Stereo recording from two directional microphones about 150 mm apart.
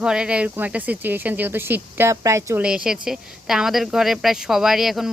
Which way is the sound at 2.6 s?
5° right (ahead or behind).